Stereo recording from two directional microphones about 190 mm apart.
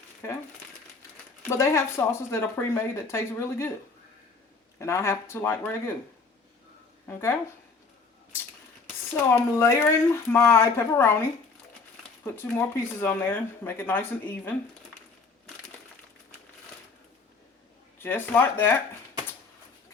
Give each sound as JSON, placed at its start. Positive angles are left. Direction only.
{"t": 0.2, "sound": "speech", "side_deg": 15}
{"t": 1.5, "sound": "speech", "side_deg": 15}
{"t": 4.8, "sound": "speech", "side_deg": 15}
{"t": 7.1, "sound": "speech", "side_deg": 15}
{"t": 9.3, "sound": "speech", "side_deg": 15}
{"t": 18.0, "sound": "speech", "side_deg": 10}